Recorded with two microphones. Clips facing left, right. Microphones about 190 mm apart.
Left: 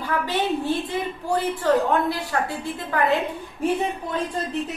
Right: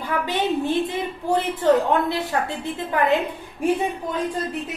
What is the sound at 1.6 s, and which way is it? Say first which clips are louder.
A woman's voice: right 2 dB; 20° right (ahead or behind).